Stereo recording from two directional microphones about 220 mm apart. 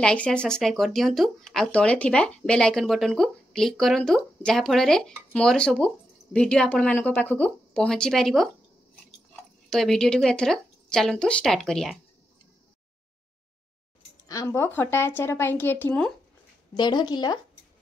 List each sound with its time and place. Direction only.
0.0 s speech: 5° left (ahead or behind)
9.7 s speech: centre (ahead or behind)
14.2 s speech: 15° left (ahead or behind)
16.7 s speech: 20° left (ahead or behind)